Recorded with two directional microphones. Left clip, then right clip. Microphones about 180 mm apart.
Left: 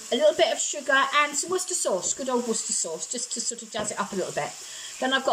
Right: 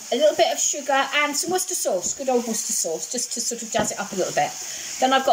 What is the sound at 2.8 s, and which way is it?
Speech, 10° right (ahead or behind).